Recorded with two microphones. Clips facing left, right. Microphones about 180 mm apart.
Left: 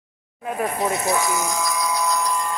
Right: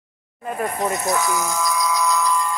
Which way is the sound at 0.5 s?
5° left (ahead or behind).